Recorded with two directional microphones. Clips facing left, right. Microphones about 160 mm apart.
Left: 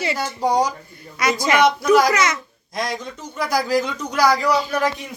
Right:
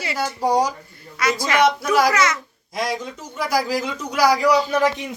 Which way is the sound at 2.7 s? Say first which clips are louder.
Right 1 dB; 5° right (ahead or behind).